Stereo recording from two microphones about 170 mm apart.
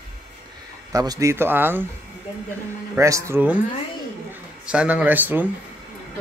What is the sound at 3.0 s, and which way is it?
Speech, 20° right (ahead or behind).